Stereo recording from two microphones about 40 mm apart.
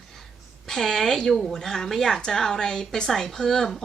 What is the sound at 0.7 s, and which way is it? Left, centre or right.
A woman's voice, centre.